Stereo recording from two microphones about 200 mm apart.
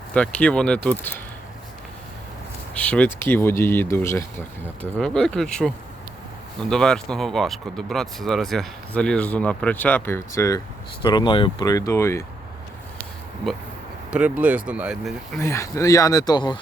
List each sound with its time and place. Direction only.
0.1 s speech: 5° left (ahead or behind)
2.7 s speech: 5° left (ahead or behind)
14.1 s speech: 5° right (ahead or behind)
15.4 s speech: 15° left (ahead or behind)